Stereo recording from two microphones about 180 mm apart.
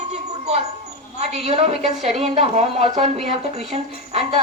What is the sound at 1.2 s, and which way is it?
A woman's voice, 35° right (ahead or behind).